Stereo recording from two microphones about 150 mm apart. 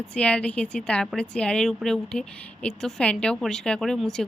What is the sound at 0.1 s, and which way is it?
A woman's voice, 10° left (ahead or behind).